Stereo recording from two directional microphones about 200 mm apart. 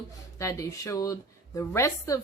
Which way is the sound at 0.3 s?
15° left (ahead or behind).